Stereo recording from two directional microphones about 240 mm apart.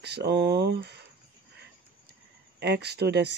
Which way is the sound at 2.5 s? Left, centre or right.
Right.